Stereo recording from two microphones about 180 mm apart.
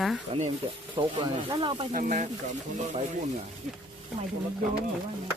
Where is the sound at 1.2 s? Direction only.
25° right (ahead or behind).